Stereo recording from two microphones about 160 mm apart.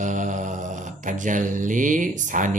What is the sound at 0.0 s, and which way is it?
Mantra, 50° right (ahead or behind).